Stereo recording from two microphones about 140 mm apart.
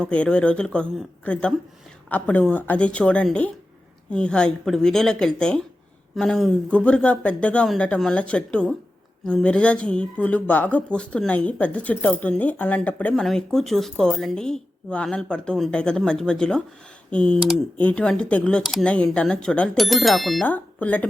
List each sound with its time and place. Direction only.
0.0 s speech: 5° left (ahead or behind)
20.5 s speech: 10° left (ahead or behind)